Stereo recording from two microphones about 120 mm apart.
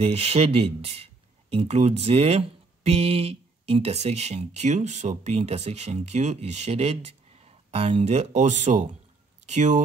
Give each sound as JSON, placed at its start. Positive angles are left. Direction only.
{"t": 0.0, "sound": "speech", "side_deg": -55}